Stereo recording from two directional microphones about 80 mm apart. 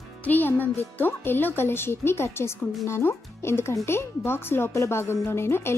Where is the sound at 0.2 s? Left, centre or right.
Left.